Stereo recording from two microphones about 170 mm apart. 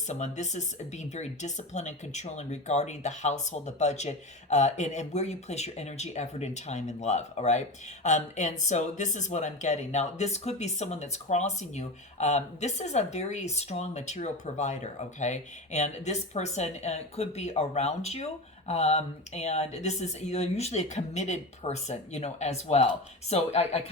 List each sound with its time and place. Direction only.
0.1 s speech: 45° left (ahead or behind)